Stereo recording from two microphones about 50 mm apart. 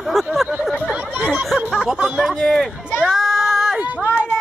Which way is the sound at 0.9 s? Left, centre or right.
Right.